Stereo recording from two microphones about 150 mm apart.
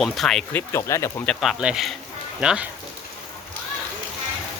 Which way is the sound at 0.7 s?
20° left (ahead or behind).